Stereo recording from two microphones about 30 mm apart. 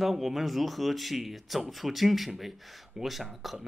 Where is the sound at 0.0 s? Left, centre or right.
Centre.